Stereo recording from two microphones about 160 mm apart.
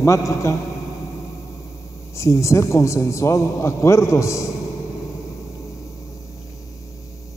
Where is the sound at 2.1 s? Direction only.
20° left (ahead or behind).